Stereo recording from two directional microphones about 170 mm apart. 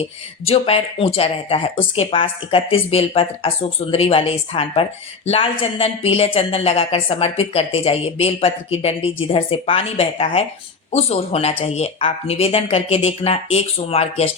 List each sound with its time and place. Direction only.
0.4 s speech: 35° left (ahead or behind)